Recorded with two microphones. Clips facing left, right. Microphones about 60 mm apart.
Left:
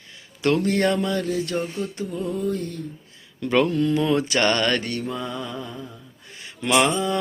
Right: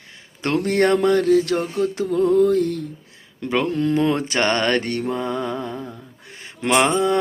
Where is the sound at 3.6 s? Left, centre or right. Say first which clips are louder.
Right 2 dB; right.